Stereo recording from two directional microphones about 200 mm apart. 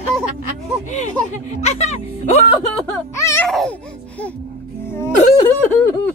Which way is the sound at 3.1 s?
15° left (ahead or behind).